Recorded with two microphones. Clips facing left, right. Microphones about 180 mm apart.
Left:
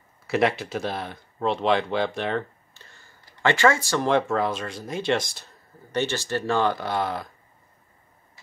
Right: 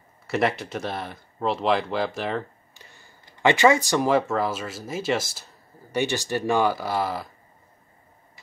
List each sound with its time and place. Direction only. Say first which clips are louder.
0.3 s speech: left 1 dB; centre (ahead or behind)
2.7 s a sound: right 2 dB; 15° right (ahead or behind)
4.1 s speech: left 2 dB; centre (ahead or behind)